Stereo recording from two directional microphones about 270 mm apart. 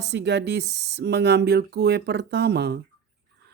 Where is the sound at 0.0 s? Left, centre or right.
Right.